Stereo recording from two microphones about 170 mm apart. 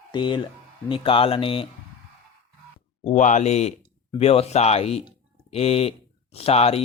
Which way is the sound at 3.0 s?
45° left (ahead or behind).